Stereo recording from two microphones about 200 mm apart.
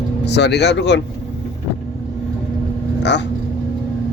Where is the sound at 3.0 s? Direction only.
60° left (ahead or behind).